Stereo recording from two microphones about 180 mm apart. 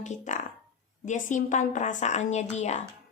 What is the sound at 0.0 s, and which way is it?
Speech, 40° left (ahead or behind).